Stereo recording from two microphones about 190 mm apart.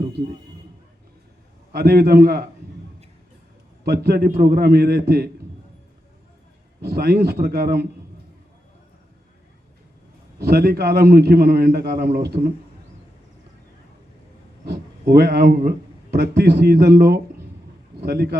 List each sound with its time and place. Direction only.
1.7 s a man's voice: 55° right (ahead or behind)
3.8 s a man's voice: 55° right (ahead or behind)
6.8 s a man's voice: 55° right (ahead or behind)
10.4 s a man's voice: 55° right (ahead or behind)
14.6 s a man's voice: 55° right (ahead or behind)